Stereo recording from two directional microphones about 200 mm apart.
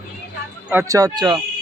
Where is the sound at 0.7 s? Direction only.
15° right (ahead or behind).